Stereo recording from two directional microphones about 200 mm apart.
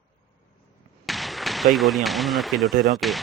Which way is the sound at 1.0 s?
Centre (ahead or behind).